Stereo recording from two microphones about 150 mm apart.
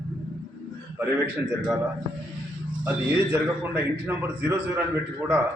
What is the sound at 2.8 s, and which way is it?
A man's voice, 15° right (ahead or behind).